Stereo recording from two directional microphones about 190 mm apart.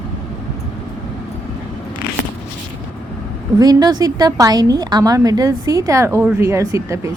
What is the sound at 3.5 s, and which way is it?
A woman's voice, 20° right (ahead or behind).